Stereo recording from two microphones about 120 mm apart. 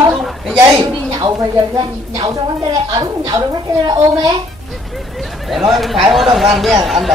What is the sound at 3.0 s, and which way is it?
Speech, 35° right (ahead or behind).